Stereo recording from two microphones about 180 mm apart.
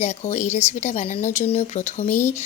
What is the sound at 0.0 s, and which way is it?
Speech, 40° left (ahead or behind).